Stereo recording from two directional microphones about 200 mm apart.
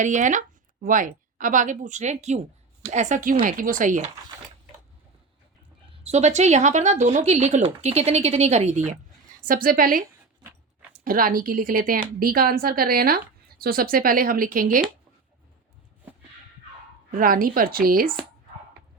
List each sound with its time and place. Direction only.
0.0 s a woman's voice: 40° right (ahead or behind)
6.0 s speech: 35° right (ahead or behind)
9.4 s a woman's voice: 45° right (ahead or behind)
11.0 s a woman's voice: 45° right (ahead or behind)
17.1 s a woman's voice: 45° right (ahead or behind)